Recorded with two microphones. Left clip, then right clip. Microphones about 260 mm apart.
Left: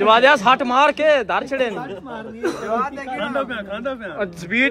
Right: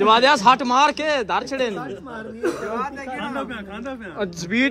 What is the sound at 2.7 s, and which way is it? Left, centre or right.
A man's voice, centre.